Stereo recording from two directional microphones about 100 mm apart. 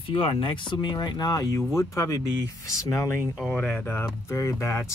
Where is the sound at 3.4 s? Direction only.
15° left (ahead or behind).